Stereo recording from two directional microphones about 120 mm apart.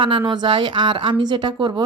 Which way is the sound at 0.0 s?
45° right (ahead or behind).